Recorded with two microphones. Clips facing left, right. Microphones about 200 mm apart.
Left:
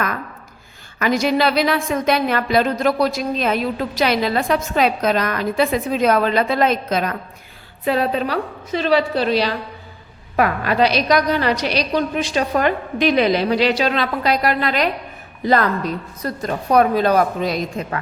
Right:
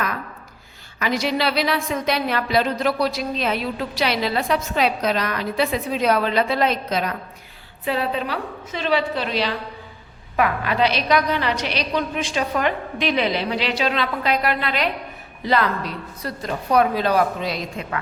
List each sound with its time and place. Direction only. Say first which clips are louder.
0.9 s a woman's voice: left 5 dB; 50° left (ahead or behind)